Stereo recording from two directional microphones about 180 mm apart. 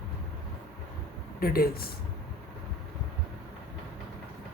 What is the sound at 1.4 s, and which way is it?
Speech, 55° left (ahead or behind).